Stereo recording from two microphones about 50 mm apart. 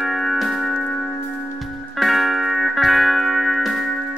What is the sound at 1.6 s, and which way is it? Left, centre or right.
Music, centre.